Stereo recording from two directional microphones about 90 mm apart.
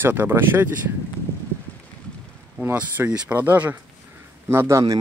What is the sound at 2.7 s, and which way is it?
Speech, 20° right (ahead or behind).